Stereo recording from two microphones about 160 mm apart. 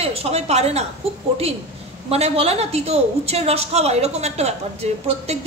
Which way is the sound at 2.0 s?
40° right (ahead or behind).